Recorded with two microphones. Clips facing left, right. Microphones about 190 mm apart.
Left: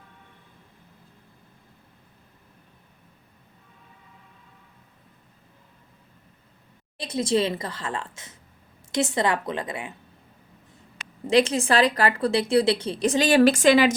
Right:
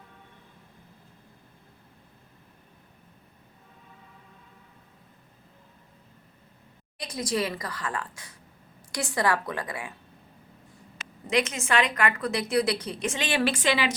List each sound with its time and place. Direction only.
7.0 s a woman's voice: 25° left (ahead or behind)
11.3 s a woman's voice: 30° left (ahead or behind)